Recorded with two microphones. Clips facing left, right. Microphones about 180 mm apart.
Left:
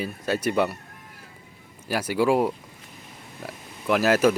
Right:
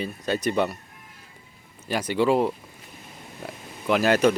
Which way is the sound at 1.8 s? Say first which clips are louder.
Even; 5° left (ahead or behind).